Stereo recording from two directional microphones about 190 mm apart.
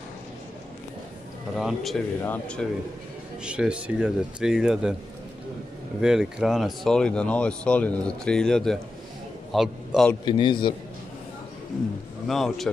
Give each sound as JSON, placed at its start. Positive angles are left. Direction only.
{"t": 1.6, "sound": "speech", "side_deg": 0}
{"t": 3.4, "sound": "speech", "side_deg": -5}
{"t": 5.9, "sound": "a man's voice", "side_deg": 0}
{"t": 10.2, "sound": "a man's voice", "side_deg": 25}
{"t": 12.3, "sound": "speech", "side_deg": 0}